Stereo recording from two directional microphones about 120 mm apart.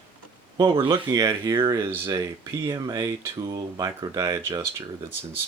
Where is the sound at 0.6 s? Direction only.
40° right (ahead or behind).